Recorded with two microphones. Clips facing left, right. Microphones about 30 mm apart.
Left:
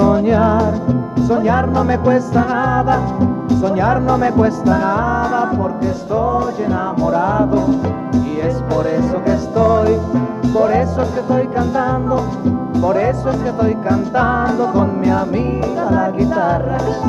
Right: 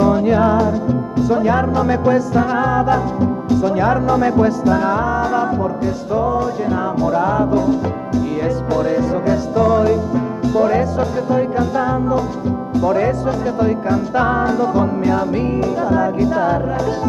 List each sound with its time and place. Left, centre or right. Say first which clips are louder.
0.0 s music: left 1 dB; centre
3.4 s speech: even; centre
8.7 s speech: left 1 dB; centre